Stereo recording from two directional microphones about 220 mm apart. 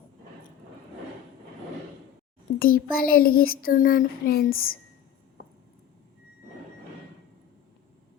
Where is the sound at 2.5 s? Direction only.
40° left (ahead or behind).